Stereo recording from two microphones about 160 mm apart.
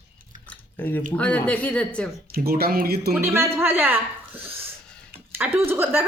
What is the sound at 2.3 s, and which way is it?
Speech, 70° right (ahead or behind).